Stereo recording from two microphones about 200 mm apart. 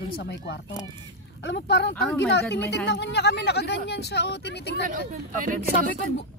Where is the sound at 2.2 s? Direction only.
60° left (ahead or behind).